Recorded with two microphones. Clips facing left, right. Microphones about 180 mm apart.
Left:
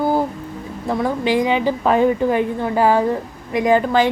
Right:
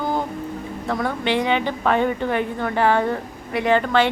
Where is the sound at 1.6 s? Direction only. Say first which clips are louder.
Left 4 dB; 35° left (ahead or behind).